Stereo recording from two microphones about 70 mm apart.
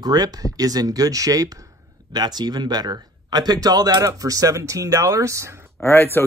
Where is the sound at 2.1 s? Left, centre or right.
Right.